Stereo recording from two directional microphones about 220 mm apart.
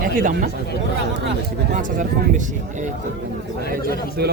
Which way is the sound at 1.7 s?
35° right (ahead or behind).